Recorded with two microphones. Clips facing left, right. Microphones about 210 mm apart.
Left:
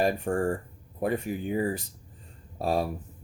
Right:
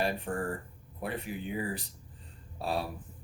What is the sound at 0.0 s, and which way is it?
Speech, 45° left (ahead or behind).